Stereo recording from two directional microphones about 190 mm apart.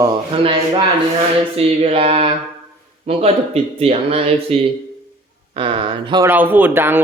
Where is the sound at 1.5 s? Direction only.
30° right (ahead or behind).